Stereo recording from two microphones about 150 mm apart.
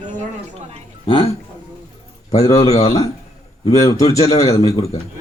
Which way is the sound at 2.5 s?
45° left (ahead or behind).